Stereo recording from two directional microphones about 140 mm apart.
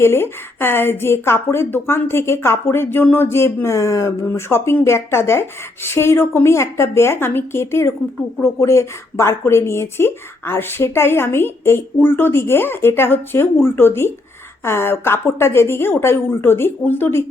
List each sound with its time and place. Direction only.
0.0 s a woman's voice: 15° left (ahead or behind)